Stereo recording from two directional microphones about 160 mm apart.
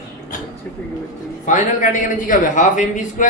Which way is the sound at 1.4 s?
50° left (ahead or behind).